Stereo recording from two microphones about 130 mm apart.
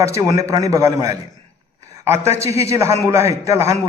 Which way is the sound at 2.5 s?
25° right (ahead or behind).